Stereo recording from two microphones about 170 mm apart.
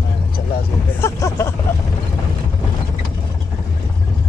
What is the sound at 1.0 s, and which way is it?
Speech, 15° left (ahead or behind).